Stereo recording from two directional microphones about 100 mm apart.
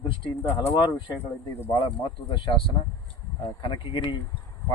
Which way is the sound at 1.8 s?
55° left (ahead or behind).